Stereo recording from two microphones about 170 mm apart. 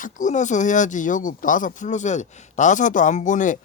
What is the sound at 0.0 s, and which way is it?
Speech, 45° left (ahead or behind).